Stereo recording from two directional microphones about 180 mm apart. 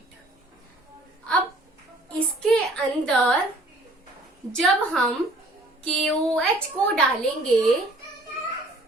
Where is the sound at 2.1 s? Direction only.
5° left (ahead or behind).